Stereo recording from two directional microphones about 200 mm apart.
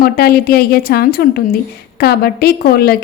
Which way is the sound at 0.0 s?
50° left (ahead or behind).